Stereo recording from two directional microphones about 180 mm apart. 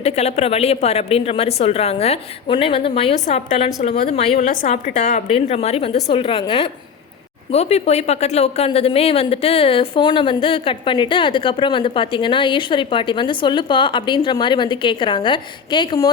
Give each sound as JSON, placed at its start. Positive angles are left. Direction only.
{"t": 0.0, "sound": "a woman's voice", "side_deg": 35}